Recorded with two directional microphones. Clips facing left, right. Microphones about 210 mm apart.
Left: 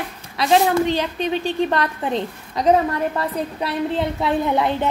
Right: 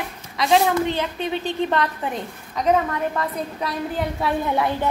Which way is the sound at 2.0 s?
30° left (ahead or behind).